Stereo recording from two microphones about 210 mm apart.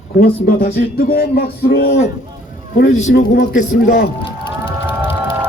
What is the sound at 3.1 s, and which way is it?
Speech, 50° left (ahead or behind).